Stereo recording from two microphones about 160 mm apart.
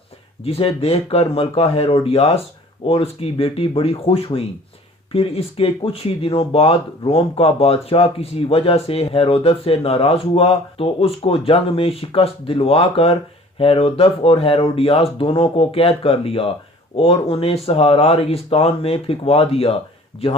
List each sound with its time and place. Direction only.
0.4 s speech: 40° left (ahead or behind)